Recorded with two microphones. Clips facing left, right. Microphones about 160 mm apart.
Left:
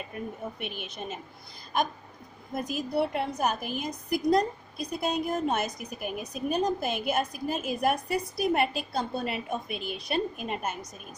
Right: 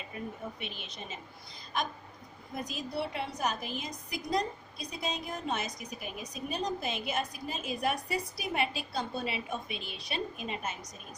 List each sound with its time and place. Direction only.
0.6 s a woman's voice: 55° left (ahead or behind)
2.5 s a woman's voice: 50° left (ahead or behind)